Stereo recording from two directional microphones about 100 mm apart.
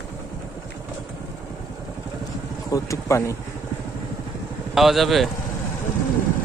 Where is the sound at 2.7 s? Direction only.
35° left (ahead or behind).